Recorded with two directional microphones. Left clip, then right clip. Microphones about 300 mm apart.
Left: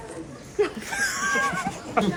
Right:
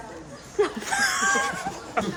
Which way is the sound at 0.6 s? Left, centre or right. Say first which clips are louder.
Even; right.